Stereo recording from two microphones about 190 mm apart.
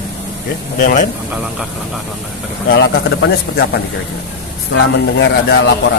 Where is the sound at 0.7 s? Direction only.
45° left (ahead or behind).